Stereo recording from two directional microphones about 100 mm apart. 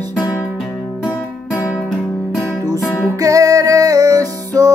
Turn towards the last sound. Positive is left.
turn(degrees=-35)  # may be behind; listen again after turning